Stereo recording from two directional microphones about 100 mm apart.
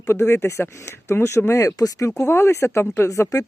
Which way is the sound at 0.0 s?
25° left (ahead or behind).